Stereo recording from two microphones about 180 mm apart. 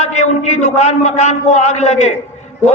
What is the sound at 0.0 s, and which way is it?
A man's voice, 40° left (ahead or behind).